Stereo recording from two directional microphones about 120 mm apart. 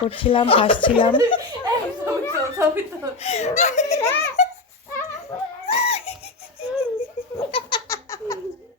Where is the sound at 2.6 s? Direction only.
20° right (ahead or behind).